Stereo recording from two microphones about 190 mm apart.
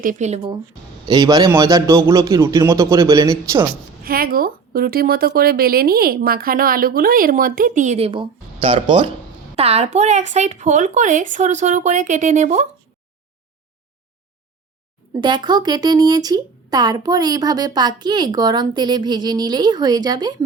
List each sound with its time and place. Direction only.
0.0 s a man's voice: 40° right (ahead or behind); by 3.7 s 15° right (ahead or behind)
4.0 s speech: 50° right (ahead or behind)
15.2 s speech: 25° right (ahead or behind)